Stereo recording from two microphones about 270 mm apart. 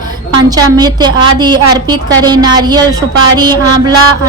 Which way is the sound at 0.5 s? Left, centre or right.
Centre.